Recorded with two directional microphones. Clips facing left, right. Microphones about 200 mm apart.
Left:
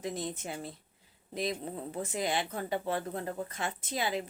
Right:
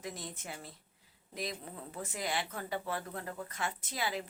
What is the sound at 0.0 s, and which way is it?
Speech, 25° left (ahead or behind).